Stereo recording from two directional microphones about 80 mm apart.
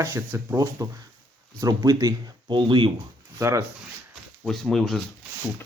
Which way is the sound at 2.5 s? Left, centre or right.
Right.